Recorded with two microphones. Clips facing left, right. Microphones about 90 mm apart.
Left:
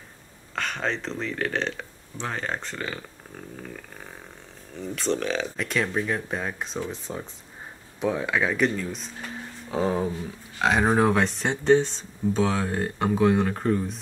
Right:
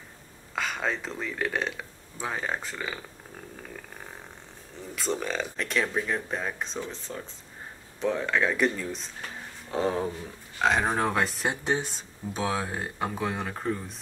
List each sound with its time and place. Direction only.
0.6 s speech: 5° right (ahead or behind)
6.8 s speech: 15° left (ahead or behind)
8.0 s speech: 5° left (ahead or behind)